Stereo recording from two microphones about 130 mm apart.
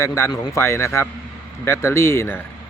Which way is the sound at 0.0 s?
20° left (ahead or behind).